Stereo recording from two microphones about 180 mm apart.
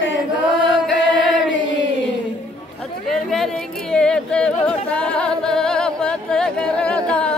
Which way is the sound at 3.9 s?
5° left (ahead or behind).